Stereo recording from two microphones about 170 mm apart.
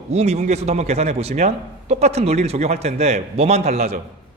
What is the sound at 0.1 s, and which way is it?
A man's voice, 40° right (ahead or behind).